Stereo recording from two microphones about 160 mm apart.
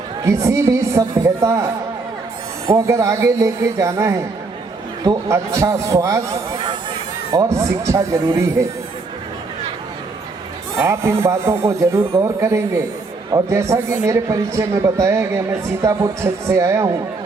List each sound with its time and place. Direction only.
0.3 s a man's voice: 20° right (ahead or behind)
7.3 s a man's voice: 20° right (ahead or behind)
10.8 s a man's voice: 15° right (ahead or behind)